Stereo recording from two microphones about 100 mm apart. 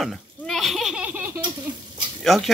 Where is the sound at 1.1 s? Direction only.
20° right (ahead or behind).